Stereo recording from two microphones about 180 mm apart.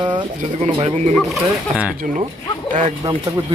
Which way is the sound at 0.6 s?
40° right (ahead or behind).